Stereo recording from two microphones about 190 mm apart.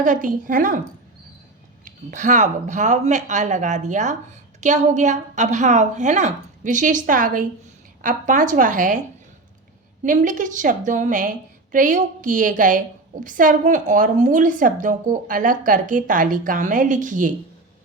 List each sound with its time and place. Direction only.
0.0 s a woman's voice: 45° right (ahead or behind)
1.8 s a woman's voice: 45° right (ahead or behind)
10.0 s a woman's voice: 40° right (ahead or behind)